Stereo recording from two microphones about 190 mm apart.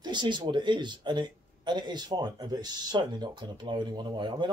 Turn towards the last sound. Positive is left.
turn(degrees=-25)  # may be behind; listen again after turning